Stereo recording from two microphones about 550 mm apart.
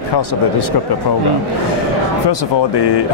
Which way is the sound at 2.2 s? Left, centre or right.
Left.